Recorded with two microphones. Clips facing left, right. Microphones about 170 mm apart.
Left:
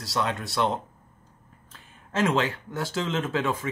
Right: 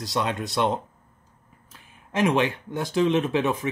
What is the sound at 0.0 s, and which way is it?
Speech, 20° right (ahead or behind).